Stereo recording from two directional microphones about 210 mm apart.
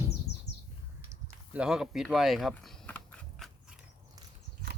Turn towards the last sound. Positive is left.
turn(degrees=5)  # may be behind; listen again after turning